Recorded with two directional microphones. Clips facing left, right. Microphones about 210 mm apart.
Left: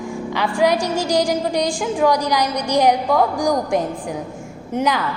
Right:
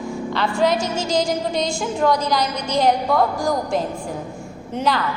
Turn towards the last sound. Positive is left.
turn(degrees=15)  # may be behind; listen again after turning